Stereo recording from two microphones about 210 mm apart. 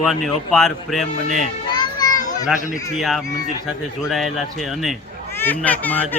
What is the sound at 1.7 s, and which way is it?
Children playing, 20° left (ahead or behind).